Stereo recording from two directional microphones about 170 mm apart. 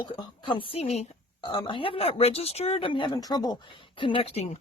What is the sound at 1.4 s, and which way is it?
Speech, 25° left (ahead or behind).